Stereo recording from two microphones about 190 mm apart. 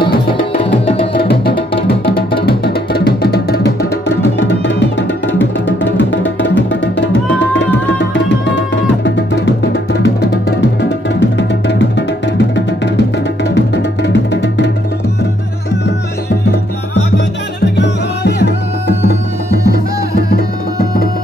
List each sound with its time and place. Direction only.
1.1 s music: 55° left (ahead or behind)
4.2 s music: 70° left (ahead or behind)
8.1 s music: 70° left (ahead or behind)
17.7 s music: 60° left (ahead or behind)